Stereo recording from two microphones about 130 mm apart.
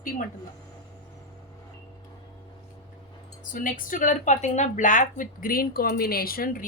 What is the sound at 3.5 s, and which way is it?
A woman's voice, 90° left.